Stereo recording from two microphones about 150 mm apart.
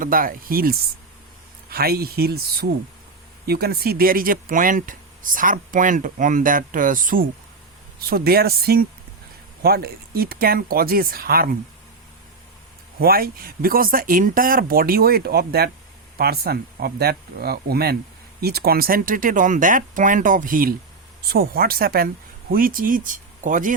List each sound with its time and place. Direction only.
0.0 s speech: 70° right (ahead or behind)
1.7 s speech: 90° right; by 7.3 s 65° right (ahead or behind)
7.9 s speech: 90° right
13.0 s speech: 85° right; by 20.7 s 70° right (ahead or behind)
21.2 s speech: 90° right; by 23.7 s 60° right (ahead or behind)